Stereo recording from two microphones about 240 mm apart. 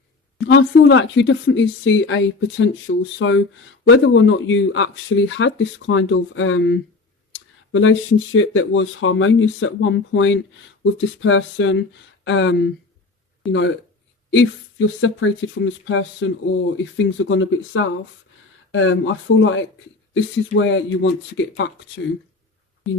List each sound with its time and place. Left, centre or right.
0.4 s speech: left
14.3 s speech: left